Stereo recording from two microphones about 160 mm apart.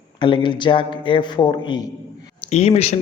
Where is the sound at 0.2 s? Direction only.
30° left (ahead or behind).